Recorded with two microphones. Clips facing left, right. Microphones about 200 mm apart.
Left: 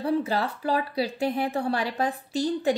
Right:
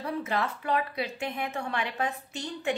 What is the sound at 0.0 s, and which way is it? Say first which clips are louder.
A woman's voice: left 5 dB; 30° left (ahead or behind).